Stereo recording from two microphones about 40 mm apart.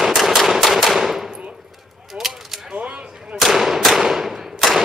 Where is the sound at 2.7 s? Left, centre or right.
Right.